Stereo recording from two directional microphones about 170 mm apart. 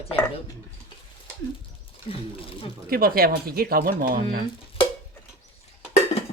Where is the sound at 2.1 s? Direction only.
35° left (ahead or behind).